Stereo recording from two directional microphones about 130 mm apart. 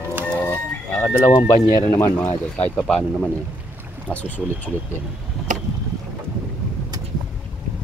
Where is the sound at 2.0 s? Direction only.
15° left (ahead or behind).